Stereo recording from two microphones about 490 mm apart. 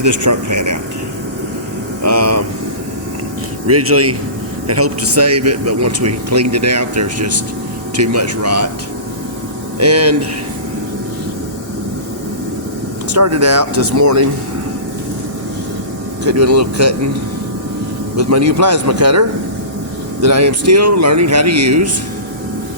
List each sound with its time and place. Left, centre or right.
0.0 s speech: right
2.0 s speech: right
3.7 s speech: right
9.7 s speech: right
13.1 s speech: right
16.2 s speech: right
18.2 s speech: right
20.2 s speech: right